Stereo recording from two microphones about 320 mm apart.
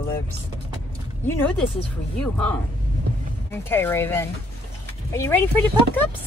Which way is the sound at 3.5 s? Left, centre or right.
Centre.